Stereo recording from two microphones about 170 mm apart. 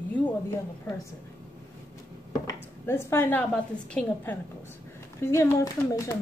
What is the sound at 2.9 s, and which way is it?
A woman's voice, 15° left (ahead or behind).